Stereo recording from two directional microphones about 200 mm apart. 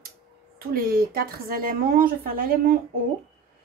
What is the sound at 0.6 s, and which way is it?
A woman's voice, 45° right (ahead or behind).